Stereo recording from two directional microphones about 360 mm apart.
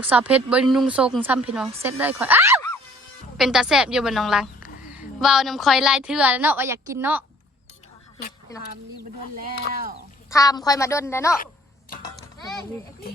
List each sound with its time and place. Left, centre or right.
0.0 s speech: centre
8.5 s a woman's voice: centre
10.2 s a woman's voice: centre
12.0 s music: centre